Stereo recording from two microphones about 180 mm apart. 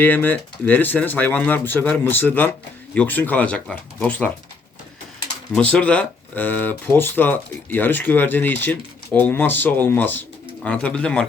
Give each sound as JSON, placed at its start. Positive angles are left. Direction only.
{"t": 0.0, "sound": "speech", "side_deg": 10}
{"t": 5.7, "sound": "speech", "side_deg": 5}